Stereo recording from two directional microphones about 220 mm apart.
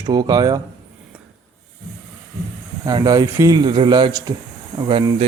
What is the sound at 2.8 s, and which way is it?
Speech, 15° right (ahead or behind).